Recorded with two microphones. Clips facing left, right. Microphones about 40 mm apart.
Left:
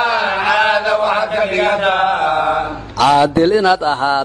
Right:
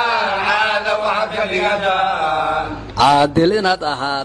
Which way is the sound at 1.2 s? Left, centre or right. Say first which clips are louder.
Left 3 dB; left.